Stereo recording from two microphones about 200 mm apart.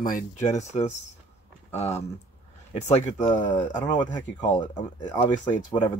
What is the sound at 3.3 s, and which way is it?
Speech, 25° left (ahead or behind).